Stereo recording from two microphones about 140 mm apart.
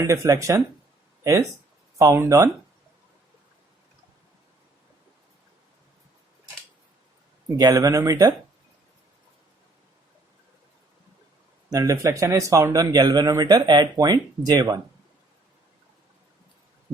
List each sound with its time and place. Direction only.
0.0 s speech: 25° right (ahead or behind)
7.5 s speech: 25° right (ahead or behind)
11.7 s speech: 25° right (ahead or behind)